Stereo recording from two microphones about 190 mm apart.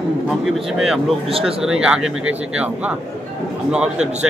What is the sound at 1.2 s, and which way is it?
Speech, 30° right (ahead or behind).